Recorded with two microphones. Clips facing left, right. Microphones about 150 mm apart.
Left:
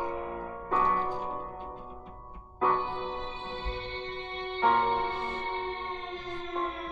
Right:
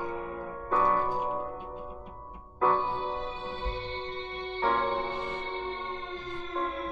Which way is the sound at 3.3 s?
20° left (ahead or behind).